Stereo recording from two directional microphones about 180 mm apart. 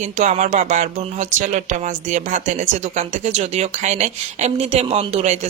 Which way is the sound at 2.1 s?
40° right (ahead or behind).